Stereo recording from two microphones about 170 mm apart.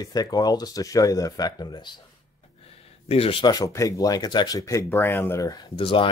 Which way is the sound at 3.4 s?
20° left (ahead or behind).